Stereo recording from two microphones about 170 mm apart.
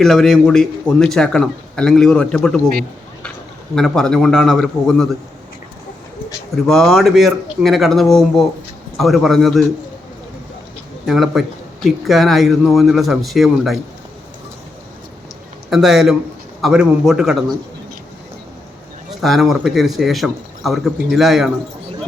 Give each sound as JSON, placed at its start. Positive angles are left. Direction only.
{"t": 0.0, "sound": "speech", "side_deg": 0}
{"t": 3.8, "sound": "speech", "side_deg": 5}
{"t": 6.7, "sound": "speech", "side_deg": 0}
{"t": 11.0, "sound": "speech", "side_deg": 0}
{"t": 15.7, "sound": "speech", "side_deg": 0}
{"t": 19.2, "sound": "speech", "side_deg": 0}